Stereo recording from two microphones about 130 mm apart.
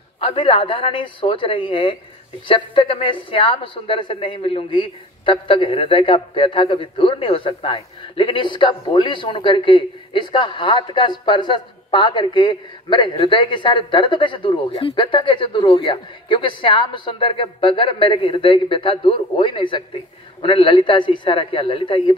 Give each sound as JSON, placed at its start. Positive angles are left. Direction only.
{"t": 0.2, "sound": "speech", "side_deg": 40}